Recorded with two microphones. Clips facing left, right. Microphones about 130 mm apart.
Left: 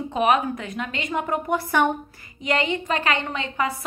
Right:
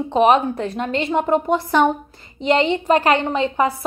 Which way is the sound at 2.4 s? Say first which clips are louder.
Right 7 dB; 30° right (ahead or behind).